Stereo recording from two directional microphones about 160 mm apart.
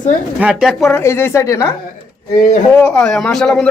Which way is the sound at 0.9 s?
15° left (ahead or behind).